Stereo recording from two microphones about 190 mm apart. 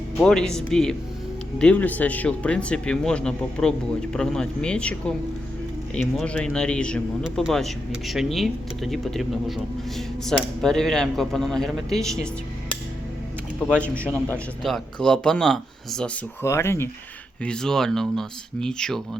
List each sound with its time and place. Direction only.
0.2 s a man's voice: centre (ahead or behind)
13.7 s a man's voice: 5° left (ahead or behind)
16.4 s a man's voice: 15° left (ahead or behind)